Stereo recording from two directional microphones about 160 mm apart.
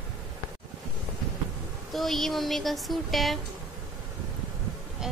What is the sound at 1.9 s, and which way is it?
Speech, centre (ahead or behind).